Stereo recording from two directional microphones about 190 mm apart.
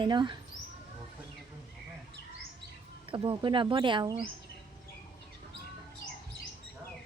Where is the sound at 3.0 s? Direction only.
25° right (ahead or behind).